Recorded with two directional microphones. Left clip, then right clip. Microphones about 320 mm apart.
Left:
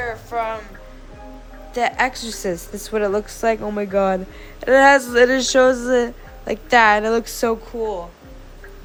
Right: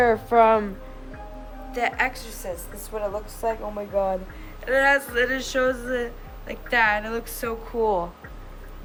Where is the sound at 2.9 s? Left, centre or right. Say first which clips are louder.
Left 9 dB; left.